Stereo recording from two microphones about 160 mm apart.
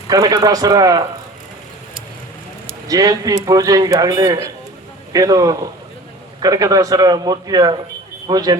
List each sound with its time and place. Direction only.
0.1 s a man's voice: 25° right (ahead or behind)
2.6 s a man's voice: 20° right (ahead or behind)